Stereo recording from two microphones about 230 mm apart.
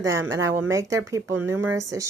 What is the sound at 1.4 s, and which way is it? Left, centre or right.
Speech, right.